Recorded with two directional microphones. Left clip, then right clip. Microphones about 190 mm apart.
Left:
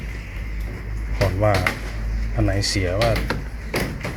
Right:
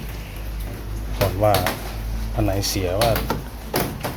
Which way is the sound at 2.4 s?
10° left (ahead or behind).